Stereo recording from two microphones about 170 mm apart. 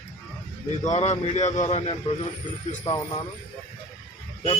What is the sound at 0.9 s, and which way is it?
Speech, 45° left (ahead or behind).